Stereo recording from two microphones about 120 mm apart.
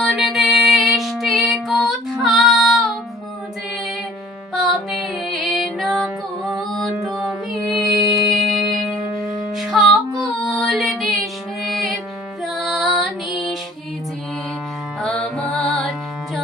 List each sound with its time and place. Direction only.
0.0 s music: centre (ahead or behind)
4.5 s music: centre (ahead or behind)
15.0 s music: 5° left (ahead or behind)